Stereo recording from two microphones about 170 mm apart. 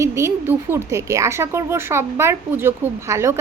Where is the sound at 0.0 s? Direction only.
15° right (ahead or behind).